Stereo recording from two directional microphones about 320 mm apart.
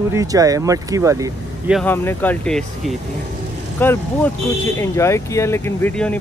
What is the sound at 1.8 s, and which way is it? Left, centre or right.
Speech, centre.